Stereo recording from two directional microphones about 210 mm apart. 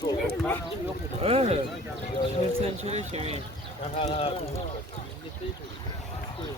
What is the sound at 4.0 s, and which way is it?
Speech, 30° left (ahead or behind).